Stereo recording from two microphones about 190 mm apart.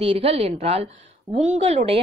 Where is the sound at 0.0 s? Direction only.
35° right (ahead or behind).